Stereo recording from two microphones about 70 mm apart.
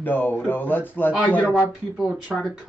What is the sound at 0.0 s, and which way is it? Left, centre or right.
Speech, left.